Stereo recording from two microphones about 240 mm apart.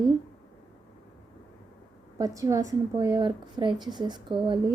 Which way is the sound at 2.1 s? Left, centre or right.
Centre.